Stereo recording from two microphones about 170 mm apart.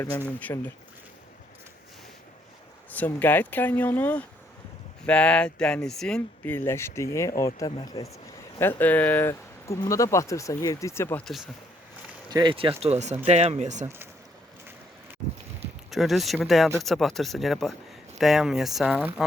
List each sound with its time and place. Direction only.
0.3 s speech: 10° left (ahead or behind)
2.9 s speech: 10° left (ahead or behind)
8.5 s speech: 10° left (ahead or behind)
12.3 s speech: 25° right (ahead or behind); by 13.8 s 45° right (ahead or behind)
15.9 s speech: centre (ahead or behind)